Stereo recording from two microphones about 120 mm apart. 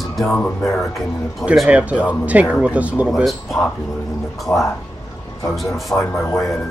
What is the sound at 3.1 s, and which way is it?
Speech, centre (ahead or behind).